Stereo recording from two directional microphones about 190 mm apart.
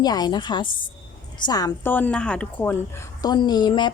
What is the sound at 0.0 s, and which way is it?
A woman's voice, 20° left (ahead or behind).